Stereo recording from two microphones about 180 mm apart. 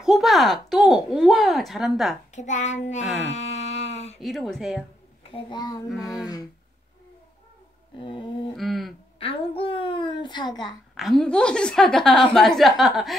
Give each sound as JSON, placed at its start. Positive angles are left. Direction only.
{"t": 0.0, "sound": "speech", "side_deg": 0}
{"t": 2.3, "sound": "a child's voice", "side_deg": 40}
{"t": 3.3, "sound": "a sound", "side_deg": 40}
{"t": 4.2, "sound": "a woman's voice", "side_deg": 0}
{"t": 5.3, "sound": "a child's voice", "side_deg": 25}
{"t": 8.0, "sound": "a child's voice", "side_deg": 25}
{"t": 8.5, "sound": "a woman's voice", "side_deg": 0}
{"t": 9.2, "sound": "a woman's voice", "side_deg": 30}
{"t": 11.0, "sound": "a woman's voice", "side_deg": 0}